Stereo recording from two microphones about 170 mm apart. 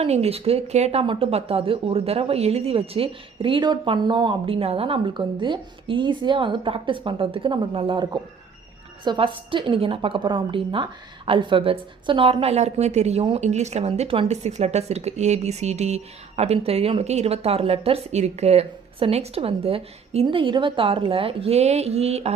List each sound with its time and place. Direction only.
0.0 s a woman's voice: 35° right (ahead or behind)